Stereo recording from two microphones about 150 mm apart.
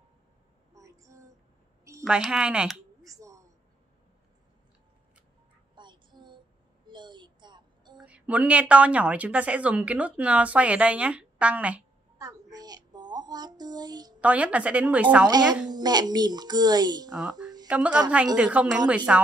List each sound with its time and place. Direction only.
0.7 s child singing: 20° right (ahead or behind)
2.0 s speech: 5° right (ahead or behind)
3.0 s a sound: 20° right (ahead or behind)
5.8 s child singing: 30° right (ahead or behind)
6.9 s a sound: 30° right (ahead or behind)
8.0 s a woman's voice: 10° right (ahead or behind)
12.2 s a sound: 25° right (ahead or behind)
14.2 s a woman's voice: 10° right (ahead or behind)
15.7 s speech: 25° right (ahead or behind)
17.1 s a woman's voice: 5° right (ahead or behind)